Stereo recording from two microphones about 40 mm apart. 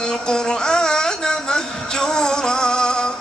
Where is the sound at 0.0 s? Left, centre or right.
Centre.